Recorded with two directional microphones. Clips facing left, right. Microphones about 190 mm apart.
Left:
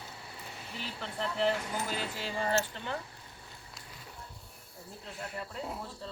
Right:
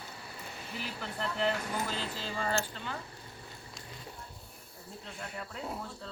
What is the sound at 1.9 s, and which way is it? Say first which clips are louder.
Speech: left 1 dB; 15° left (ahead or behind).